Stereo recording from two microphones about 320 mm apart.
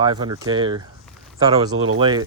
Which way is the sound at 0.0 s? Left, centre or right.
Centre.